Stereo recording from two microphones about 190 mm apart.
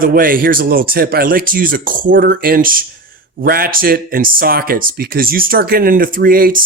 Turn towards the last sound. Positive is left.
turn(degrees=-50)  # may be behind; listen again after turning